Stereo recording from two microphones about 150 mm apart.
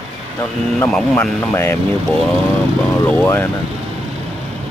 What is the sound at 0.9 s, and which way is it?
Speech, 10° left (ahead or behind).